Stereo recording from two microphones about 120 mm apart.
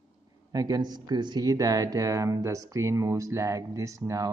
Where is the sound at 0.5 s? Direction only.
35° right (ahead or behind).